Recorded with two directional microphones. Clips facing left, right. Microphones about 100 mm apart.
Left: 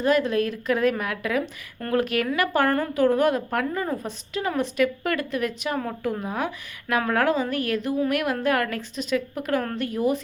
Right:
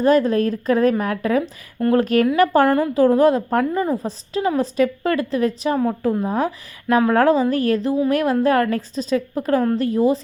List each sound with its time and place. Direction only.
0.0 s a woman's voice: 40° right (ahead or behind)
2.6 s a woman's voice: 15° right (ahead or behind)
2.9 s a woman's voice: 30° right (ahead or behind)